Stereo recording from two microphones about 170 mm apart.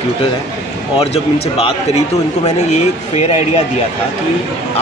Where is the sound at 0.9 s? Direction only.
35° left (ahead or behind).